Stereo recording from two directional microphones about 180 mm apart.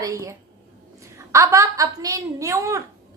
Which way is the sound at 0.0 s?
15° right (ahead or behind).